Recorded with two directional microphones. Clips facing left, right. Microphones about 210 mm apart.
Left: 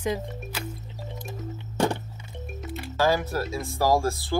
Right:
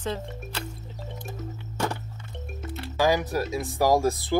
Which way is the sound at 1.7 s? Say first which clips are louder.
Left 5 dB; 30° left (ahead or behind).